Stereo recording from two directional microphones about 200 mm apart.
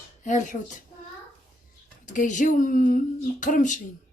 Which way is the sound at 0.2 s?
40° left (ahead or behind).